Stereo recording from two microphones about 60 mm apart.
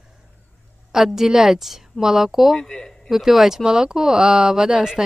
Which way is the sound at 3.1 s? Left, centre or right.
Centre.